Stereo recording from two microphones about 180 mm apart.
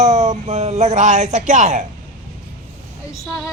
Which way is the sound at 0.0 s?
40° right (ahead or behind).